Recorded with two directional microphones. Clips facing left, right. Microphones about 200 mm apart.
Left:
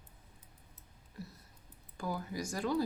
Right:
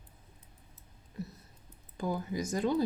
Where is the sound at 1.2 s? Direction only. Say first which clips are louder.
Right 6 dB; 20° right (ahead or behind).